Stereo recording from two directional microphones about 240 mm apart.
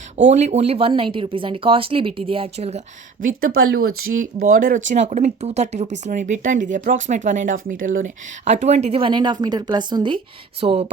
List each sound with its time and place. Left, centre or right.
0.3 s speech: right